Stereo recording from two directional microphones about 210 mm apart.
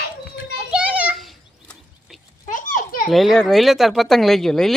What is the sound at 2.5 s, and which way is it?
Children playing, 40° left (ahead or behind).